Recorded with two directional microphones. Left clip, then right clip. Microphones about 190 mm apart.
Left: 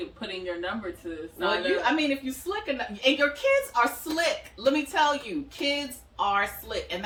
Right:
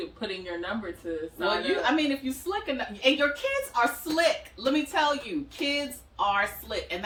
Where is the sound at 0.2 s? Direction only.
5° right (ahead or behind).